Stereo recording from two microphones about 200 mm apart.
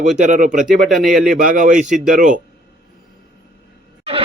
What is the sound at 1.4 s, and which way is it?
Speech, 45° right (ahead or behind).